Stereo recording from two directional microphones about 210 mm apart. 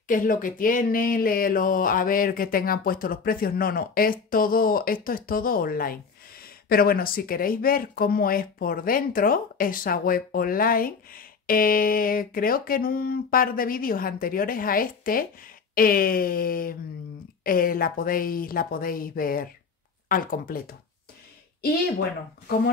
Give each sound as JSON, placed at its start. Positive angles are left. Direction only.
{"t": 0.1, "sound": "speech", "side_deg": 40}